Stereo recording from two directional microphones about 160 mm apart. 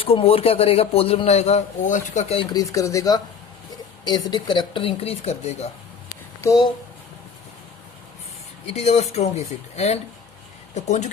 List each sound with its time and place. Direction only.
0.0 s speech: 35° left (ahead or behind)
2.4 s speech: 25° left (ahead or behind); by 5.6 s 40° left (ahead or behind)
6.4 s speech: 20° left (ahead or behind)
8.7 s speech: 45° left (ahead or behind)